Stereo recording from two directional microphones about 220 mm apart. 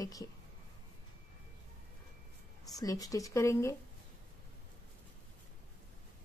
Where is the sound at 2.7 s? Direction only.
15° left (ahead or behind).